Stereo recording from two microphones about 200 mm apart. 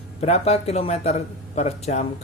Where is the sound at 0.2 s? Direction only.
30° left (ahead or behind).